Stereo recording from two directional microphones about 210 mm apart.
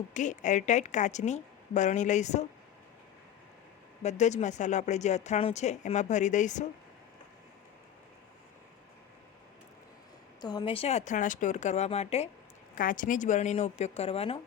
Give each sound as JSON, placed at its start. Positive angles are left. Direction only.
{"t": 0.1, "sound": "a woman's voice", "side_deg": 35}
{"t": 4.0, "sound": "a woman's voice", "side_deg": 35}
{"t": 10.4, "sound": "a woman's voice", "side_deg": 20}